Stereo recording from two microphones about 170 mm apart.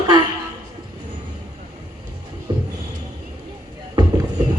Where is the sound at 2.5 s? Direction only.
25° right (ahead or behind).